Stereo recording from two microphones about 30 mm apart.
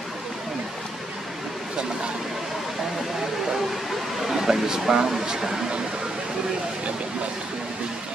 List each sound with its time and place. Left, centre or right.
4.3 s speech: centre